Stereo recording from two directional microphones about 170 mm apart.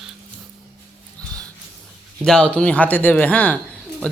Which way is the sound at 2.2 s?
5° left (ahead or behind).